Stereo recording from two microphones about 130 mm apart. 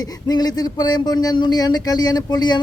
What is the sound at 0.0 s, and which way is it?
A man's voice, 30° left (ahead or behind).